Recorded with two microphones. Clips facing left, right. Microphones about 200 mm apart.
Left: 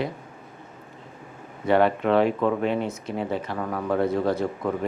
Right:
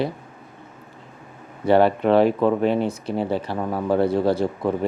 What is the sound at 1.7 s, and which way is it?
Speech, 35° right (ahead or behind).